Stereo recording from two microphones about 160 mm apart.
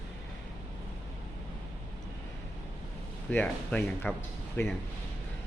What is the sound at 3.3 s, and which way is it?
A man's voice, 10° left (ahead or behind).